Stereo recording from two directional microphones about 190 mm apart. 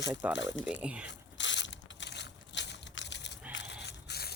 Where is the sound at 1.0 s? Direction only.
70° left (ahead or behind).